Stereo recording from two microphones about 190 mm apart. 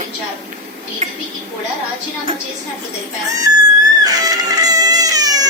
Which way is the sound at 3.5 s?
20° right (ahead or behind).